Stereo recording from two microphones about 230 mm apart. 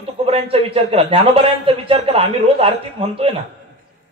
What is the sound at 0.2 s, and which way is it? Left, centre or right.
A man's voice, right.